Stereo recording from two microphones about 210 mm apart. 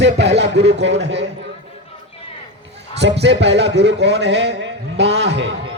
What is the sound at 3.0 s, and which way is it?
A man's voice, 55° right (ahead or behind).